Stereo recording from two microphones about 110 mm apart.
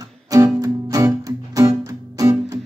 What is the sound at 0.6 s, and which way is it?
Music, 30° right (ahead or behind).